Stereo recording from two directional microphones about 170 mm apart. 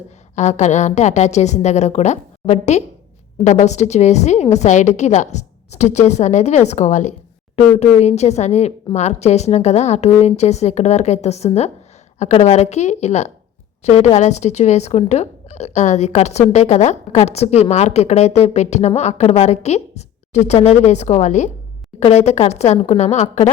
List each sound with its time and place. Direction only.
0.3 s a woman's voice: 45° left (ahead or behind)